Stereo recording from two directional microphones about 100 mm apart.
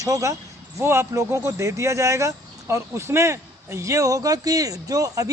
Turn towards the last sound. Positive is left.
turn(degrees=-35)  # may be behind; listen again after turning